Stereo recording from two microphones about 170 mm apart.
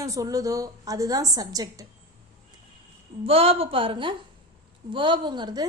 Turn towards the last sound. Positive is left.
turn(degrees=-25)  # may be behind; listen again after turning